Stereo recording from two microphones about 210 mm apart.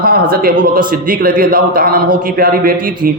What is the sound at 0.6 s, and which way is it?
A man's voice, 40° right (ahead or behind).